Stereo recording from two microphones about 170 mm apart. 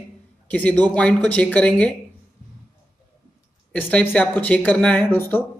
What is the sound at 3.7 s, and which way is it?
Speech, 10° left (ahead or behind).